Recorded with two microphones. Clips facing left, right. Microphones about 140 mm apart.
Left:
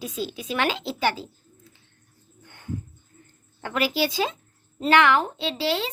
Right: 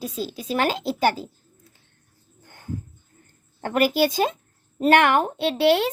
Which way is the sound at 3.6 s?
50° right (ahead or behind).